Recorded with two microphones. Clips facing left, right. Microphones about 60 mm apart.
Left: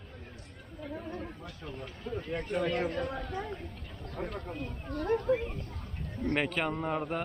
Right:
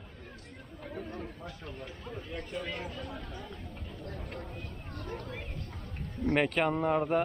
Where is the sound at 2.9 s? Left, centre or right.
Left.